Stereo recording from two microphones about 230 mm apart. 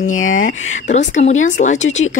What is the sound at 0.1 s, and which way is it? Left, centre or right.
Speech, left.